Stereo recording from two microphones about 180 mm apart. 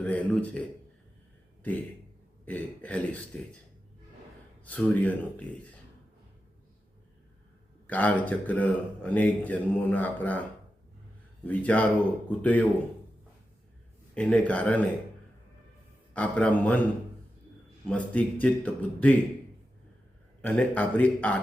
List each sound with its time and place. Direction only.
0.0 s speech: 10° left (ahead or behind)
2.4 s speech: 10° left (ahead or behind)
4.6 s speech: 5° left (ahead or behind)
7.9 s speech: 10° left (ahead or behind)
11.4 s speech: 10° left (ahead or behind)
14.2 s speech: 5° left (ahead or behind)
16.1 s speech: 5° left (ahead or behind)
17.8 s speech: 5° left (ahead or behind)
20.4 s speech: 10° left (ahead or behind)